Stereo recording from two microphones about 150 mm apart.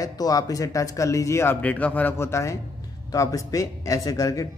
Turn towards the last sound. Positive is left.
turn(degrees=25)  # may be behind; listen again after turning